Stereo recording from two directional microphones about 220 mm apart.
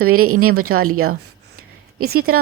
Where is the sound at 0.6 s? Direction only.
40° right (ahead or behind).